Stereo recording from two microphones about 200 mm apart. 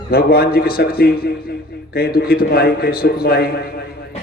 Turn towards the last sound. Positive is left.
turn(degrees=50)  # may be behind; listen again after turning